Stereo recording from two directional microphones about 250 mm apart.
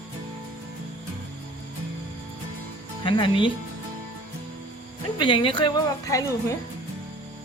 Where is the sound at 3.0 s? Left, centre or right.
Centre.